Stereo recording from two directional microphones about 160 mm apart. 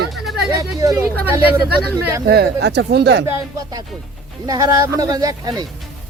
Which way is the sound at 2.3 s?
85° right.